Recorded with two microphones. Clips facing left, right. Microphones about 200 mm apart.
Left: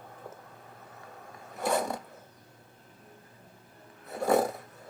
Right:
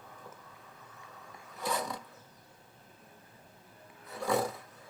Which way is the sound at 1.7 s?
45° left (ahead or behind).